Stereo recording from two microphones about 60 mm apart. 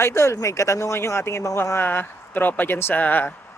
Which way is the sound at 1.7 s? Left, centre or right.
Left.